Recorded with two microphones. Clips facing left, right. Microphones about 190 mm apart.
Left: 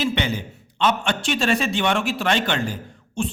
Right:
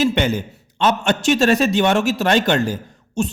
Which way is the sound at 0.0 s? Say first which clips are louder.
Right 6 dB; 45° right (ahead or behind).